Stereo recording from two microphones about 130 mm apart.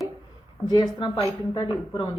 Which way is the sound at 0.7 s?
35° left (ahead or behind).